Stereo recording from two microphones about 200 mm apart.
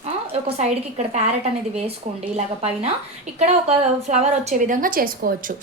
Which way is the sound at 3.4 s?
35° right (ahead or behind).